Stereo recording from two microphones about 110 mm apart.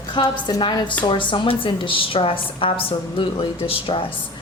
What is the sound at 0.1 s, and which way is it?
A woman's voice, 40° left (ahead or behind).